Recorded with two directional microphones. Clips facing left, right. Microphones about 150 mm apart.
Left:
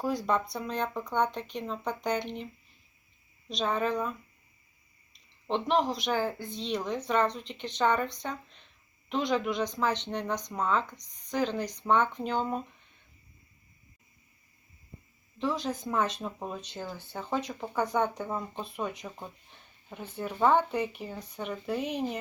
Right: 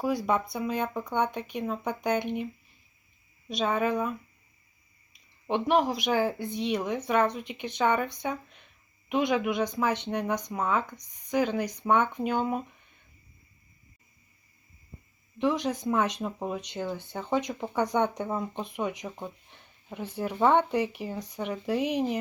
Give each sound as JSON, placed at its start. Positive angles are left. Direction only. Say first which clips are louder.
{"t": 0.0, "sound": "speech", "louder": "right 2 dB", "side_deg": -10}
{"t": 3.5, "sound": "speech", "louder": "right 2 dB", "side_deg": -10}
{"t": 5.1, "sound": "speech", "louder": "right 2 dB", "side_deg": -10}
{"t": 15.4, "sound": "speech", "louder": "right 4 dB", "side_deg": -15}
{"t": 20.1, "sound": "speech", "louder": "right 2 dB", "side_deg": -15}
{"t": 20.5, "sound": "speech", "louder": "right 2 dB", "side_deg": -70}
{"t": 21.4, "sound": "speech", "louder": "right 3 dB", "side_deg": -5}
{"t": 21.8, "sound": "speech", "louder": "right 7 dB", "side_deg": -75}